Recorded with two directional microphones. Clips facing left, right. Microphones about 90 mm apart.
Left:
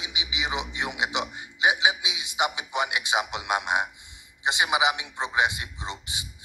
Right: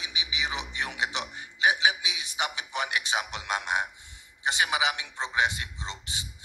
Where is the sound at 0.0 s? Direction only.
15° left (ahead or behind).